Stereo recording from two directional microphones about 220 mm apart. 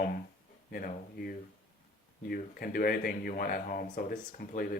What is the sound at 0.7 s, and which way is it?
Speech, 40° left (ahead or behind).